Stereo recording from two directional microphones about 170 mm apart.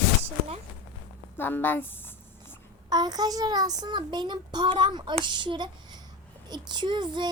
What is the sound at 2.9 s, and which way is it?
A child's voice, 25° right (ahead or behind).